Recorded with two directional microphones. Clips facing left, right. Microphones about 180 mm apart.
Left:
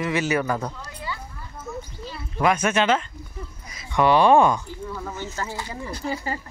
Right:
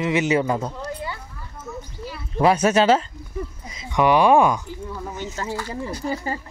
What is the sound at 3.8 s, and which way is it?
Speech, 15° right (ahead or behind).